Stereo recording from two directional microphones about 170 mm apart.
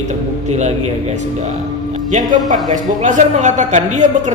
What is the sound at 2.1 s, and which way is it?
A man's voice, 50° right (ahead or behind).